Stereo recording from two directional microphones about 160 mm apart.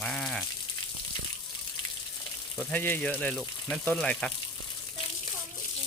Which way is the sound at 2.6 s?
10° left (ahead or behind).